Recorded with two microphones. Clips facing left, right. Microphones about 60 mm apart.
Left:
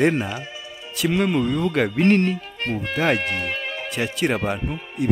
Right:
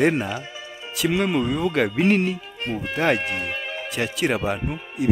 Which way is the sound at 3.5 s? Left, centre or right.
Centre.